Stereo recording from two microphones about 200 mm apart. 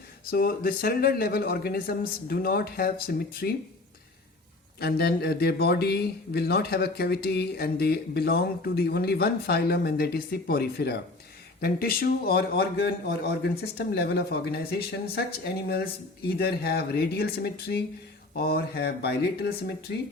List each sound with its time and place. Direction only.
0.3 s speech: 50° left (ahead or behind)
4.8 s speech: 50° left (ahead or behind)